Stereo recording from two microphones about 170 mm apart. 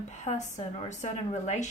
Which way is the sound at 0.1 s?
45° left (ahead or behind).